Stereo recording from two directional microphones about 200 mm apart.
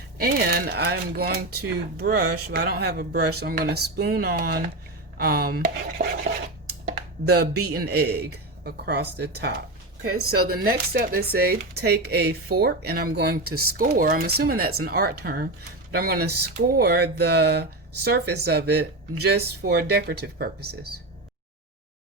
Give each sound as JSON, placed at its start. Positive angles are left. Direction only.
{"t": 0.2, "sound": "speech", "side_deg": -50}
{"t": 7.3, "sound": "speech", "side_deg": -50}